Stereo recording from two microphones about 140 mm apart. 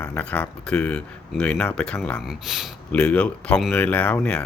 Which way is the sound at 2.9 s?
10° left (ahead or behind).